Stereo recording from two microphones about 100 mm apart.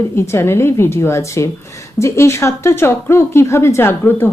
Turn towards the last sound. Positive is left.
turn(degrees=20)  # may be behind; listen again after turning